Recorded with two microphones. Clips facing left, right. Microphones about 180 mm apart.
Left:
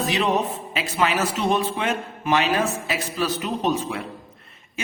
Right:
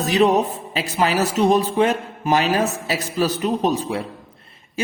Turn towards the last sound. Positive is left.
turn(degrees=-35)  # may be behind; listen again after turning